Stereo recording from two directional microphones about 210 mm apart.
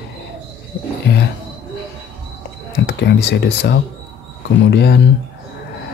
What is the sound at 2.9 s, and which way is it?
Speech, 50° left (ahead or behind).